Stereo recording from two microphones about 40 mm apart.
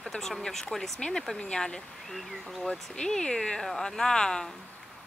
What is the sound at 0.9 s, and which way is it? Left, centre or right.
Speech, left.